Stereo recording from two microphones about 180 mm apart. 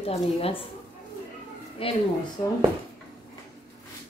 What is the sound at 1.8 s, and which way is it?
Speech, 30° left (ahead or behind).